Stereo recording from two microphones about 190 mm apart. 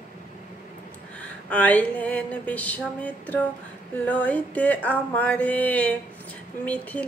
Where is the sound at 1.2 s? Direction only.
10° left (ahead or behind).